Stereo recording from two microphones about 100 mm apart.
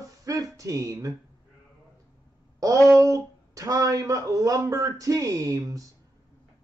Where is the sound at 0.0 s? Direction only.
35° right (ahead or behind).